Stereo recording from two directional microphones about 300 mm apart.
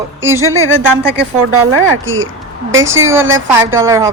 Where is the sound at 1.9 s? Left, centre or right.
Right.